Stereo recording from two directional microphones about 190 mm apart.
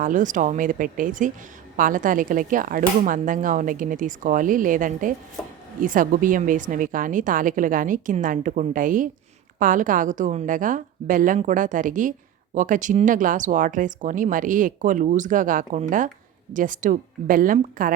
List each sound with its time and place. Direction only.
0.0 s speech: 40° right (ahead or behind)